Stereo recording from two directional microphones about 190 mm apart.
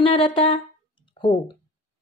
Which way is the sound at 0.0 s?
30° left (ahead or behind).